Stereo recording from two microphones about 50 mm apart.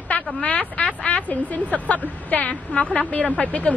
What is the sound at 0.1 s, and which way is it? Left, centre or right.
Speech, left.